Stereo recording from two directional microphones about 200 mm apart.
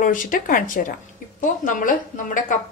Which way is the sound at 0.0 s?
40° left (ahead or behind).